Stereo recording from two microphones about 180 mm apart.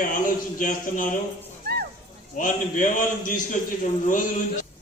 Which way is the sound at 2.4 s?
45° left (ahead or behind).